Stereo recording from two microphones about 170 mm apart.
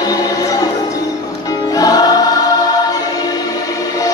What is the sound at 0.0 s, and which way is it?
Music, 20° left (ahead or behind).